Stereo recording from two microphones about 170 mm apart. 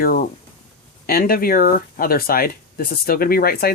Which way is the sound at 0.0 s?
55° left (ahead or behind).